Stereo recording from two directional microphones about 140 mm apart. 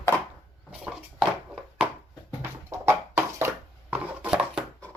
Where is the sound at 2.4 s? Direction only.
20° right (ahead or behind).